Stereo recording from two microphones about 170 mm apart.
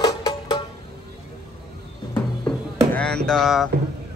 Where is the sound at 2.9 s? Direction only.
5° left (ahead or behind).